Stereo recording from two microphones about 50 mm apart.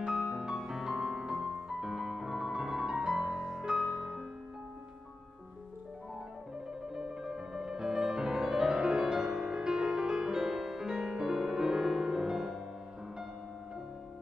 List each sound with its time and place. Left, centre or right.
0.0 s music: centre
6.9 s music: centre